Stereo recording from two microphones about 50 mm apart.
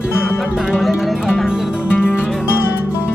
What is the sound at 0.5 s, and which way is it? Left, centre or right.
Music, centre.